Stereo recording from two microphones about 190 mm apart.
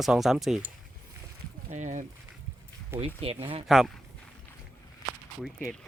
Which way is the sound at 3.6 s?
Centre (ahead or behind).